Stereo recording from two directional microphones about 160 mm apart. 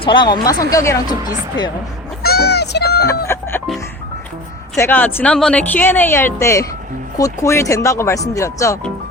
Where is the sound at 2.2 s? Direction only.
75° left (ahead or behind).